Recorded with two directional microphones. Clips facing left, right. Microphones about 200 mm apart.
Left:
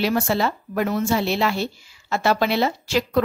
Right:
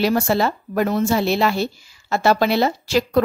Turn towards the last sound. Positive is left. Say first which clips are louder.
# right 3 dB
turn(degrees=-40)  # may be behind; listen again after turning